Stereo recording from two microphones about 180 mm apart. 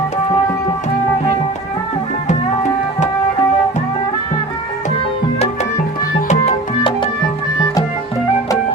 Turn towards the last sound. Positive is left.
turn(degrees=35)  # may be behind; listen again after turning